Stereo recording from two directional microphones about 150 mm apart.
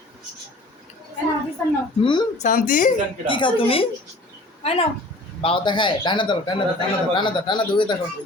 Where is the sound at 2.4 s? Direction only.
65° left (ahead or behind).